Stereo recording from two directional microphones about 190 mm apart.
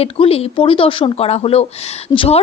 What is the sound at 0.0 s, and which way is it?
A woman's voice, 30° left (ahead or behind).